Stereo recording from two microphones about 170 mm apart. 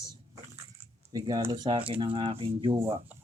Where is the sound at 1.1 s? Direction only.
20° right (ahead or behind).